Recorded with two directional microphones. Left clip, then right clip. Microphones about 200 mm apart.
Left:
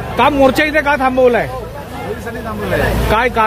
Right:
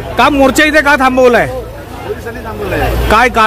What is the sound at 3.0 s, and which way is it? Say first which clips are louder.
Speech: right 7 dB; 25° right (ahead or behind).